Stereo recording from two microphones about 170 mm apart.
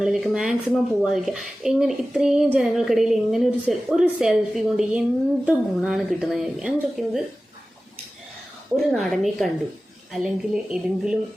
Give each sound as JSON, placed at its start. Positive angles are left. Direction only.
{"t": 0.0, "sound": "a woman's voice", "side_deg": 0}
{"t": 8.7, "sound": "a woman's voice", "side_deg": 0}